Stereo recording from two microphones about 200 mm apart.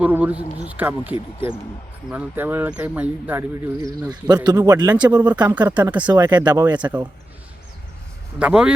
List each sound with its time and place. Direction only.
0.0 s speech: 10° right (ahead or behind)
4.0 s speech: 20° right (ahead or behind)
8.4 s speech: 5° right (ahead or behind)